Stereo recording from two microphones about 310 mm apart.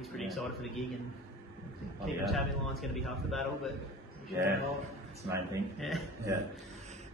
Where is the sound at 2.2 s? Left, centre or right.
Centre.